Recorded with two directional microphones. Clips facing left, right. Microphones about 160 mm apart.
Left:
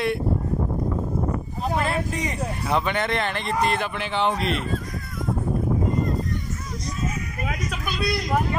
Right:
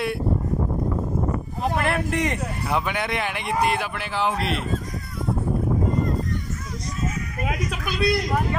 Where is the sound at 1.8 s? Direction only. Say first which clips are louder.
Right 2 dB; 65° right (ahead or behind).